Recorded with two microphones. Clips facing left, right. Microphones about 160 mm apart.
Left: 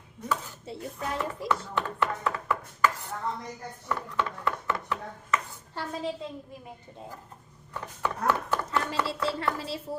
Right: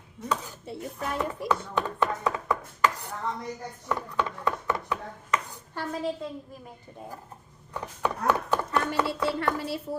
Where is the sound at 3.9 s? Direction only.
15° right (ahead or behind).